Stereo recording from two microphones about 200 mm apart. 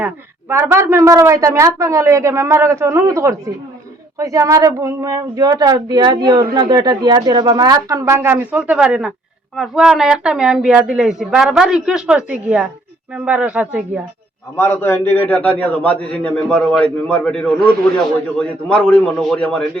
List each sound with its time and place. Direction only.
0.0 s a woman's voice: 10° right (ahead or behind)
14.5 s a man's voice: 10° left (ahead or behind)